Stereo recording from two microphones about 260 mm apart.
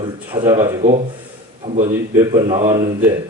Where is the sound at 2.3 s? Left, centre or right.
Centre.